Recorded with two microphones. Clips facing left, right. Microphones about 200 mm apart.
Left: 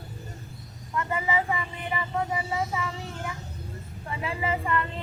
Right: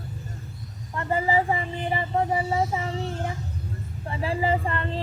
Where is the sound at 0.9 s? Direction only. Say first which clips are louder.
Right 4 dB; 35° right (ahead or behind).